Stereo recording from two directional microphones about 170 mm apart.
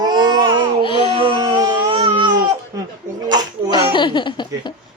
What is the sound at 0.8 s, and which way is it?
Speech, 30° left (ahead or behind).